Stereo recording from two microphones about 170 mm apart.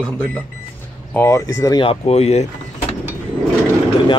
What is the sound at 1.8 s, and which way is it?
Speech, 35° left (ahead or behind).